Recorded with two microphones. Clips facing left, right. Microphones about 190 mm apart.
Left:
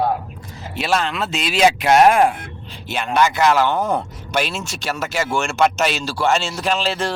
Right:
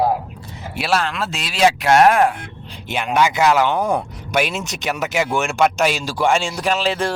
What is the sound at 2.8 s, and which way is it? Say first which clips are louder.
Speech: even; 15° right (ahead or behind).